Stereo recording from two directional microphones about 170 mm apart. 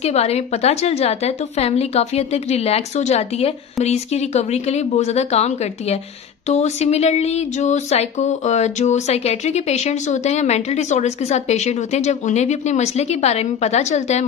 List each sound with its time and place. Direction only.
0.0 s speech: 40° left (ahead or behind)